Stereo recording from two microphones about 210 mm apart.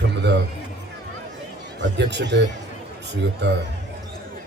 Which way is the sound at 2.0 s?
55° right (ahead or behind).